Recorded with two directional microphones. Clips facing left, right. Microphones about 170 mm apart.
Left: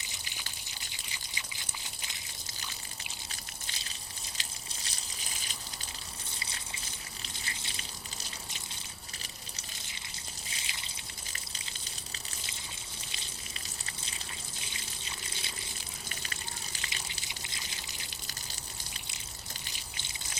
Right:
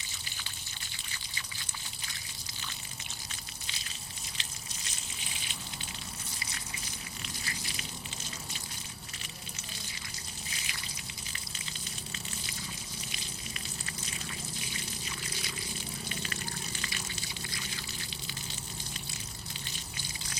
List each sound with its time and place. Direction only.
4.4 s a sound: 35° left (ahead or behind)
7.4 s water: 25° left (ahead or behind)
10.5 s trickle: 25° left (ahead or behind)
14.7 s water: 25° left (ahead or behind)
16.0 s water: 35° right (ahead or behind)
16.8 s water: 20° left (ahead or behind)